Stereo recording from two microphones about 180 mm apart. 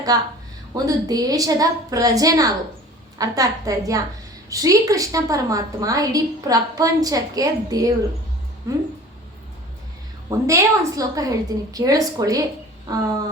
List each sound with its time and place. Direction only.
0.1 s a woman's voice: 20° right (ahead or behind)
10.2 s a woman's voice: 15° right (ahead or behind)